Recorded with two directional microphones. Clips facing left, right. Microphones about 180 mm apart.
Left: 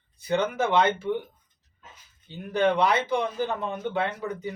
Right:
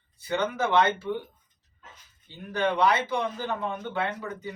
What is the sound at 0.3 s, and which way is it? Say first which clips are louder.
Speech: left 2 dB; 15° left (ahead or behind).